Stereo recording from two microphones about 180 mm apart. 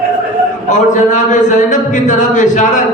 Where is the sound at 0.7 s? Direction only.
45° left (ahead or behind).